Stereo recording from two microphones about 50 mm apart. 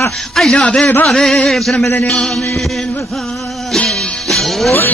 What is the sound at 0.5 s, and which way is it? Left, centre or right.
Speech, left.